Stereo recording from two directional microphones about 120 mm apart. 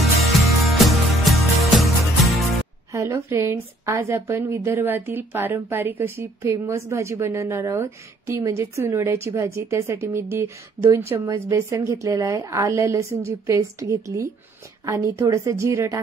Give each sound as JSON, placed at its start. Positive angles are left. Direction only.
{"t": 0.3, "sound": "music", "side_deg": 0}
{"t": 2.9, "sound": "a woman's voice", "side_deg": -25}